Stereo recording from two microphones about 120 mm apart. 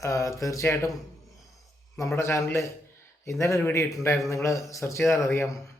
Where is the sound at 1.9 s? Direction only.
25° left (ahead or behind).